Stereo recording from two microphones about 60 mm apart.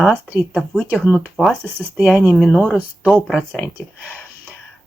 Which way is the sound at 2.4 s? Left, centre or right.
Centre.